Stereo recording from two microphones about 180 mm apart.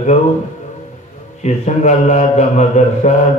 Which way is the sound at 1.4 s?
40° left (ahead or behind).